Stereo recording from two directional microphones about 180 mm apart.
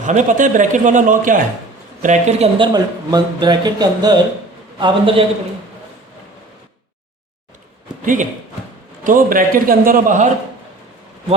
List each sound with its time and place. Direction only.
0.0 s a man's voice: 45° right (ahead or behind)
2.7 s speech: 20° right (ahead or behind)
8.0 s a man's voice: 45° right (ahead or behind)